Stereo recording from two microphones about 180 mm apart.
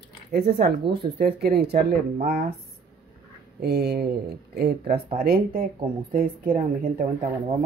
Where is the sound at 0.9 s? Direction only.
60° right (ahead or behind).